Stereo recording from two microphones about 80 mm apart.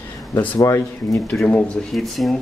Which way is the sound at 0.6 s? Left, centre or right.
Left.